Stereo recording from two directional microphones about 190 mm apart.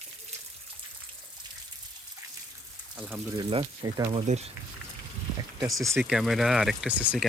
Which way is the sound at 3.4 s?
25° right (ahead or behind).